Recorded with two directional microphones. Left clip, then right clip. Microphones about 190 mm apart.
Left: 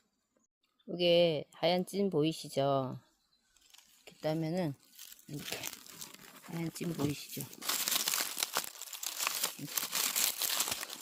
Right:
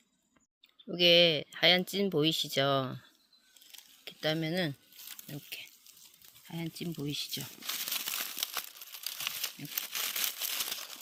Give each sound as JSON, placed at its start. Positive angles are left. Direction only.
{"t": 0.9, "sound": "speech", "side_deg": 0}
{"t": 4.0, "sound": "stir", "side_deg": 0}
{"t": 6.6, "sound": "speech", "side_deg": 5}
{"t": 7.5, "sound": "crumpling", "side_deg": 55}
{"t": 8.1, "sound": "a sound", "side_deg": 45}
{"t": 9.0, "sound": "crumpling", "side_deg": 60}
{"t": 9.7, "sound": "crumpling", "side_deg": 45}